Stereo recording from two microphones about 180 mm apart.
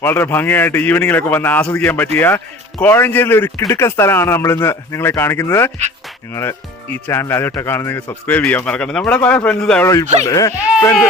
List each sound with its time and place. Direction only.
0.0 s speech: 10° left (ahead or behind)
9.8 s speech: 15° left (ahead or behind)